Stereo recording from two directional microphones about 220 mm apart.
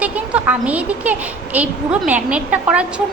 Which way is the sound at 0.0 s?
5° right (ahead or behind).